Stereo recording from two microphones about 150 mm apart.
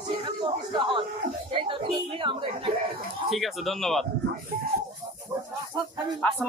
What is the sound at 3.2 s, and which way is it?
Speech, centre (ahead or behind).